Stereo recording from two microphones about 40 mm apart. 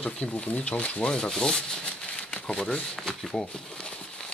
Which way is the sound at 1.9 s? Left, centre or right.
Left.